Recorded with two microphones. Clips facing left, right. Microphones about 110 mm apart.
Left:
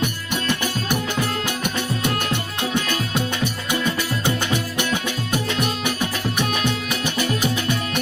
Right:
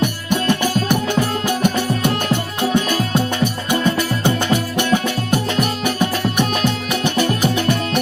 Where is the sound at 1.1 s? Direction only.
50° right (ahead or behind).